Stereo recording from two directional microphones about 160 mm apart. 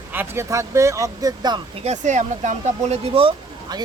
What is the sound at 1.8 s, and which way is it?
Speech, 45° right (ahead or behind).